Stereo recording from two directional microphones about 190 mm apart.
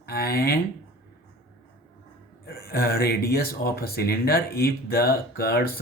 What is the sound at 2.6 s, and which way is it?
Speech, 55° left (ahead or behind).